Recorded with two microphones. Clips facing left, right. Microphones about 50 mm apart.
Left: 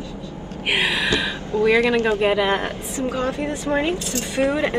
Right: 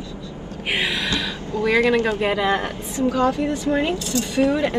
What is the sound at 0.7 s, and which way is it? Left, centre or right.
A woman's voice, left.